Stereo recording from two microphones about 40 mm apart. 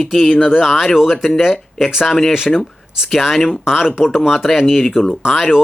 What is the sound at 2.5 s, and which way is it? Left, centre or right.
Speech, centre.